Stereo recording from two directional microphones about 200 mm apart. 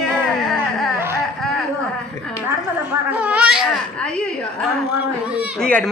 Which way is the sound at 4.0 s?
5° left (ahead or behind).